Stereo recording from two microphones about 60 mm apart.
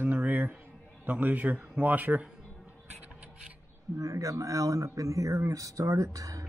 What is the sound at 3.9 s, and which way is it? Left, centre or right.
A man's voice, right.